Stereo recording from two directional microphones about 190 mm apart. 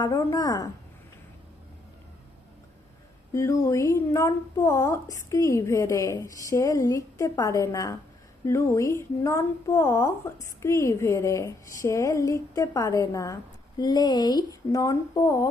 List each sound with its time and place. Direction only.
0.0 s speech: 15° left (ahead or behind)
3.3 s a woman's voice: 15° left (ahead or behind)